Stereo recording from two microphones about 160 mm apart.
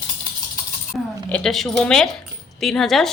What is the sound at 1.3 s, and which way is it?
Speech, 5° left (ahead or behind).